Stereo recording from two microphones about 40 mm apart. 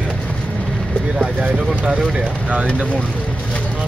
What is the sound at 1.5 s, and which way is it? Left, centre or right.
Speech, right.